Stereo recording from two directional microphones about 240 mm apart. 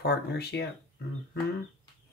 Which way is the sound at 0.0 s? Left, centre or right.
Left.